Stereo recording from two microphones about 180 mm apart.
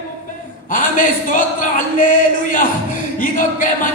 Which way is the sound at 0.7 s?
45° left (ahead or behind).